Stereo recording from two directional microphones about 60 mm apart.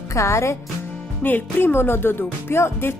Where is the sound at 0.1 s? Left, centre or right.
Left.